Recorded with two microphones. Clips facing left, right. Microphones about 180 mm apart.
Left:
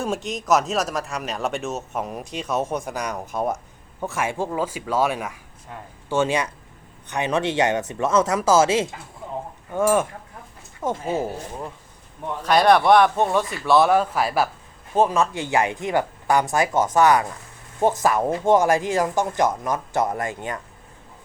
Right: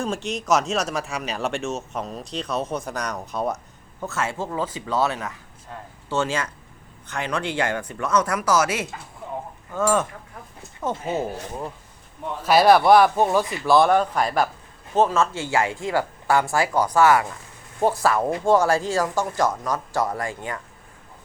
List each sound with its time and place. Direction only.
0.0 s speech: centre (ahead or behind); by 8.9 s 25° left (ahead or behind)
9.8 s speech: 10° left (ahead or behind)
12.4 s speech: 5° right (ahead or behind); by 20.6 s 20° left (ahead or behind)